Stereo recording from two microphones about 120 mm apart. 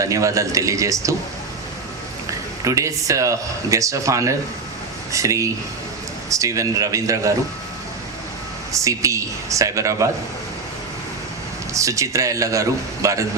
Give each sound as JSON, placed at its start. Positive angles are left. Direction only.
{"t": 0.0, "sound": "speech", "side_deg": -25}
{"t": 2.6, "sound": "speech", "side_deg": -25}
{"t": 8.7, "sound": "speech", "side_deg": -25}
{"t": 11.7, "sound": "speech", "side_deg": -25}